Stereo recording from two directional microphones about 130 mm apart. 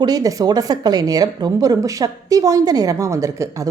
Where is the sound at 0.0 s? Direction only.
30° right (ahead or behind).